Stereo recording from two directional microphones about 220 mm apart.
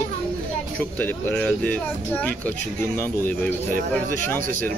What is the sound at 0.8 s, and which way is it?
Speech, 10° left (ahead or behind).